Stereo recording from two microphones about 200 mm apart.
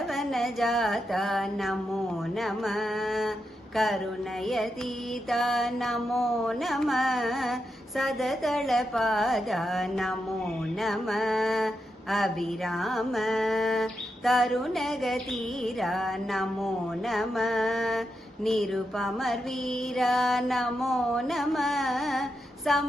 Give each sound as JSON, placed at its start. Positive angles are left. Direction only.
{"t": 0.1, "sound": "mantra", "side_deg": 0}